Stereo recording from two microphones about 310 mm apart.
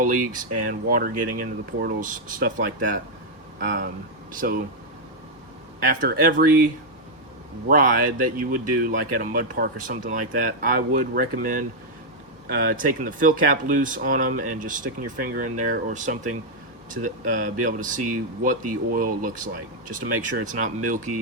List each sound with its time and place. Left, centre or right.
0.7 s speech: right
5.8 s speech: right
7.7 s speech: right